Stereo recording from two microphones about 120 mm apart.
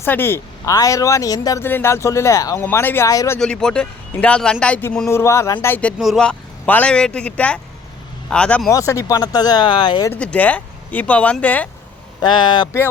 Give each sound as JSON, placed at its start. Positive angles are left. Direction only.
{"t": 0.0, "sound": "speech", "side_deg": 20}
{"t": 1.6, "sound": "speech", "side_deg": 20}
{"t": 3.4, "sound": "speech", "side_deg": 5}
{"t": 5.0, "sound": "speech", "side_deg": 25}
{"t": 6.0, "sound": "speech", "side_deg": 0}
{"t": 6.2, "sound": "speech", "side_deg": 10}
{"t": 8.7, "sound": "speech", "side_deg": 25}
{"t": 10.1, "sound": "speech", "side_deg": 10}
{"t": 12.2, "sound": "speech", "side_deg": 40}